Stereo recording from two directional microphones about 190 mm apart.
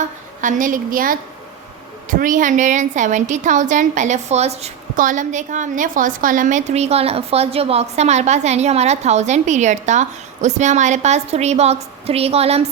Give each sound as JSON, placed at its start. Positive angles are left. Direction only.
{"t": 0.4, "sound": "a woman's voice", "side_deg": -45}